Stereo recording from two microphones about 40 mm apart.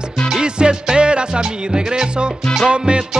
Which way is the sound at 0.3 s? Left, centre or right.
Right.